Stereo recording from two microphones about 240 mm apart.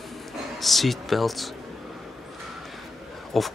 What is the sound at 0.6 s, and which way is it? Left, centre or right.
Speech, centre.